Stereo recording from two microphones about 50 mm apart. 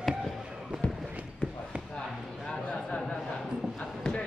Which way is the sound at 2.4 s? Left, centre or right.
Left.